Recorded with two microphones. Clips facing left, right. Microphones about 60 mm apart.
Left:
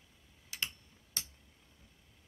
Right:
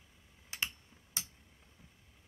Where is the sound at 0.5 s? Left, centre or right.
Right.